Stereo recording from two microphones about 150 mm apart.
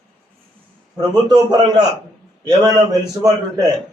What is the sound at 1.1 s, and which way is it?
A man's voice, 25° right (ahead or behind).